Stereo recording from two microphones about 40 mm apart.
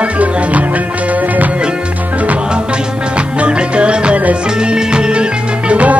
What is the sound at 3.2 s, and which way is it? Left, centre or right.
Music, right.